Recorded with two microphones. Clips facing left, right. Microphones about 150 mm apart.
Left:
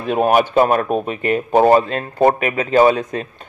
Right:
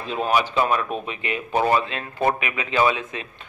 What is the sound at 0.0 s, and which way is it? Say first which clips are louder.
A man's voice: left 7 dB; 55° left (ahead or behind).